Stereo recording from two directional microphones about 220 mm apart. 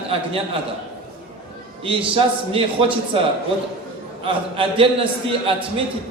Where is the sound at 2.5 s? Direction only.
25° right (ahead or behind).